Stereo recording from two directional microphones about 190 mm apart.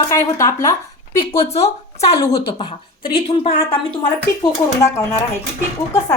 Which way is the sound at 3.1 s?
30° left (ahead or behind).